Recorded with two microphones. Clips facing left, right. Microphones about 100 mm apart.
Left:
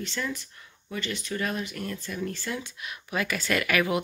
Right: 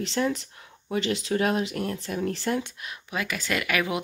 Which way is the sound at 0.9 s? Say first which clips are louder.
Right 7 dB; 80° right.